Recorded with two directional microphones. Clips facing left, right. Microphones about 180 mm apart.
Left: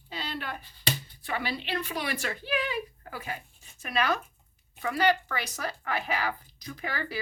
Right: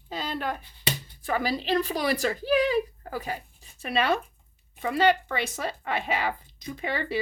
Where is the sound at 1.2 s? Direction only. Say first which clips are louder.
Right 6 dB; 40° right (ahead or behind).